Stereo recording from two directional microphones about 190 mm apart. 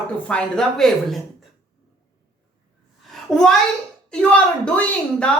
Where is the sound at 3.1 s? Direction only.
Centre (ahead or behind).